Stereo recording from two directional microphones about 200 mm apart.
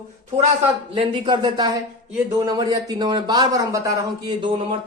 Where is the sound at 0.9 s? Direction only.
25° right (ahead or behind).